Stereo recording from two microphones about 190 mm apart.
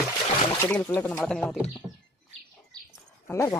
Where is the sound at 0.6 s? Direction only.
10° left (ahead or behind).